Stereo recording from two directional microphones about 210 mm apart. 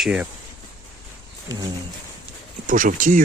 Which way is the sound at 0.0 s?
5° right (ahead or behind).